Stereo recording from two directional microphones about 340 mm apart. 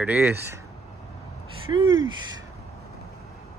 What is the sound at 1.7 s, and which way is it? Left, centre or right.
Speech, centre.